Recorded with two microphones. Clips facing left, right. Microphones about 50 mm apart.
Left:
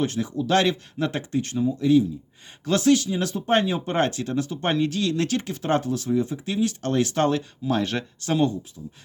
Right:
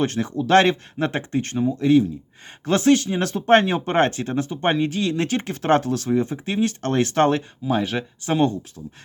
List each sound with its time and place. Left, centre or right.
0.0 s speech: right
2.6 s speech: right
5.5 s speech: right
6.1 s speech: right
7.6 s speech: centre